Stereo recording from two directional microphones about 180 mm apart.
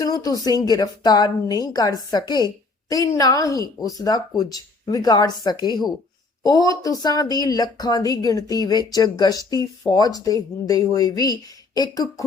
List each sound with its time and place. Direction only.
0.0 s speech: 20° left (ahead or behind)